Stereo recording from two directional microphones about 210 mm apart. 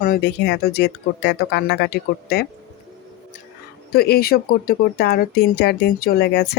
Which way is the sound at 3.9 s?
45° left (ahead or behind).